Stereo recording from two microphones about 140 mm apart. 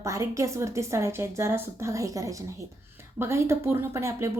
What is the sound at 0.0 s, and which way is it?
A woman's voice, 20° right (ahead or behind).